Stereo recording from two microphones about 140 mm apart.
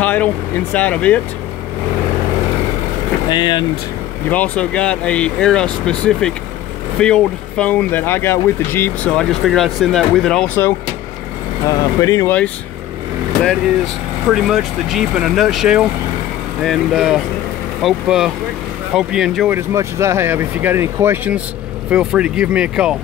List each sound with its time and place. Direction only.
0.0 s vehicle: 10° left (ahead or behind)
0.7 s speech: 10° left (ahead or behind)
3.3 s speech: 30° left (ahead or behind)
4.3 s speech: 10° left (ahead or behind)
12.0 s speech: 25° left (ahead or behind)
14.3 s speech: centre (ahead or behind)
19.5 s speech: 20° right (ahead or behind)